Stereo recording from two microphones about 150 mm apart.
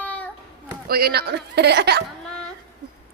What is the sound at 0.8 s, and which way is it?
A woman's voice, 90° right.